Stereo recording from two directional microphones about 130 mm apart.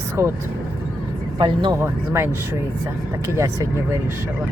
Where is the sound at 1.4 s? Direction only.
40° right (ahead or behind).